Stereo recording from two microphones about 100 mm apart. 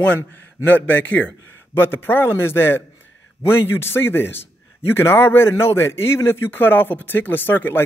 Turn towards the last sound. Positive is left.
turn(degrees=20)  # may be behind; listen again after turning